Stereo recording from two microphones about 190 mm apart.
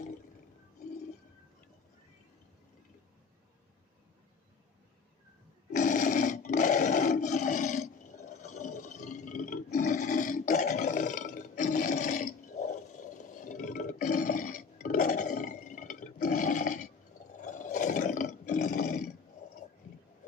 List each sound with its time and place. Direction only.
5.7 s roar: 40° left (ahead or behind)